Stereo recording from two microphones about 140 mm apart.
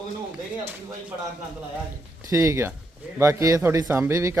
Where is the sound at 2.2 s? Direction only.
20° right (ahead or behind).